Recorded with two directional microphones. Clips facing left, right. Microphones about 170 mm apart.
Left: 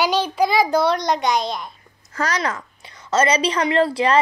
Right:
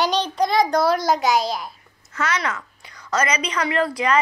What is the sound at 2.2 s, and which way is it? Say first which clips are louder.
A woman's voice: left 2 dB; 35° left (ahead or behind).